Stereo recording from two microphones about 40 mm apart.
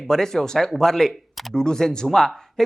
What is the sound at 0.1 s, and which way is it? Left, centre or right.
Speech, centre.